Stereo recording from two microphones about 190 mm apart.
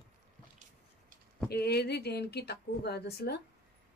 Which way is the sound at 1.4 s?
55° left (ahead or behind).